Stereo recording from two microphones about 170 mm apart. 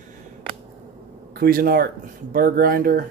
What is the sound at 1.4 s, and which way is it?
Speech, 60° right (ahead or behind).